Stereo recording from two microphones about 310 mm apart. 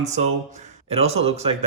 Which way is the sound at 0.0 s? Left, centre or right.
Right.